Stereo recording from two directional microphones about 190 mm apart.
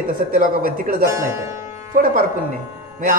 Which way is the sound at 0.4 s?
50° right (ahead or behind).